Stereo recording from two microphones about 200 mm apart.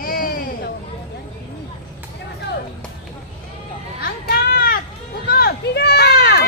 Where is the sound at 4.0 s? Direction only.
50° left (ahead or behind).